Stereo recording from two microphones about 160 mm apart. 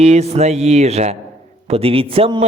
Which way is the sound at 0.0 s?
45° right (ahead or behind).